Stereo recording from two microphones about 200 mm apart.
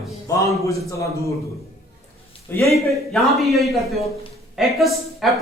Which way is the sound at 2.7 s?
Centre (ahead or behind).